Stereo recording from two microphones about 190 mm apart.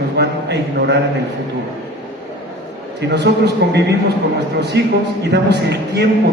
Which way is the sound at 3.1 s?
60° right (ahead or behind).